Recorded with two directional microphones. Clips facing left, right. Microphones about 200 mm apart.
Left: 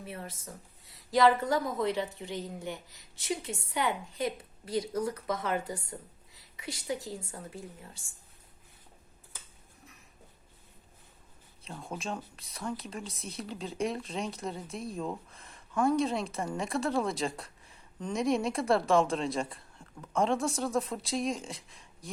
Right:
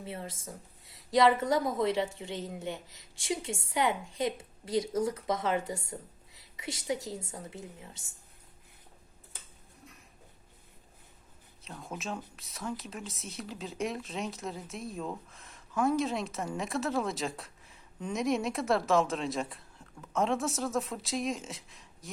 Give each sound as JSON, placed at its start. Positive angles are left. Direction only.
{"t": 0.0, "sound": "a woman's voice", "side_deg": -25}
{"t": 11.6, "sound": "speech", "side_deg": 0}